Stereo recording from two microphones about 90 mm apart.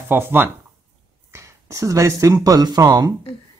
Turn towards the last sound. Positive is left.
turn(degrees=-40)  # may be behind; listen again after turning